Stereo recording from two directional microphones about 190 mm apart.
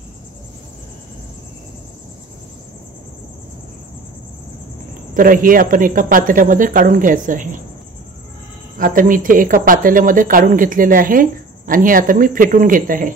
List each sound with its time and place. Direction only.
5.1 s speech: 45° right (ahead or behind)
8.7 s speech: 45° right (ahead or behind)